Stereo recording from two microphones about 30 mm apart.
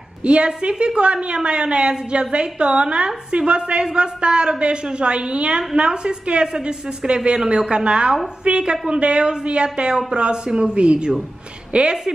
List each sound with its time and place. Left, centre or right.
0.2 s a woman's voice: right
11.7 s a woman's voice: right